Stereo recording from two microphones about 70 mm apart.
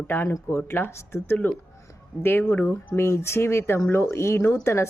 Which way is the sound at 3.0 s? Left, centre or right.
Left.